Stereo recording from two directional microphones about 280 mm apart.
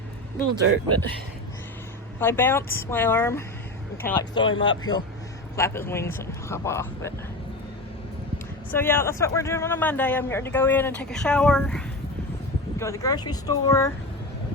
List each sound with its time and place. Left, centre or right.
2.1 s a man's voice: centre
8.7 s a man's voice: centre